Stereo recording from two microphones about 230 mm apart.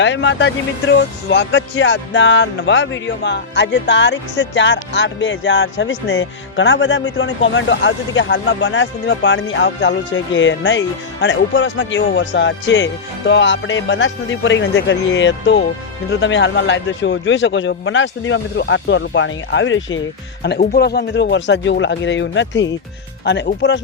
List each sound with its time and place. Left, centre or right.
0.0 s speech: left
20.4 s speech: left